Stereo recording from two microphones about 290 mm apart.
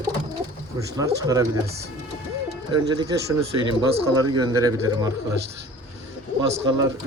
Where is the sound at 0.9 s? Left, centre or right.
Centre.